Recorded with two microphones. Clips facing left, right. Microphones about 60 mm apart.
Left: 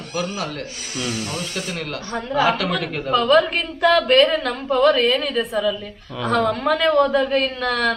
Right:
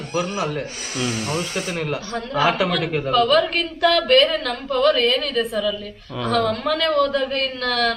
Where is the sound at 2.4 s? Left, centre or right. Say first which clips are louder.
Right 1 dB; centre.